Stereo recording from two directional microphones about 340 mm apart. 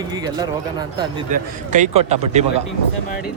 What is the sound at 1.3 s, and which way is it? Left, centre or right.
A man's voice, right.